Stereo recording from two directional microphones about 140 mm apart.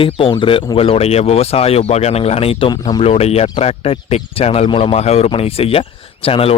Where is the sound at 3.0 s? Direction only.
45° left (ahead or behind).